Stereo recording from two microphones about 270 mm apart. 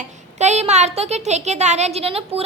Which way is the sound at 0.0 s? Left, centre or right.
Right.